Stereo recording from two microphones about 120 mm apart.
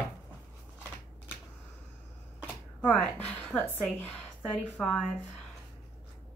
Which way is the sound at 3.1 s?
15° left (ahead or behind).